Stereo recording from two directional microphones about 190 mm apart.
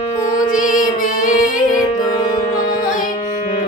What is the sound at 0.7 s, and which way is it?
Music, 45° left (ahead or behind).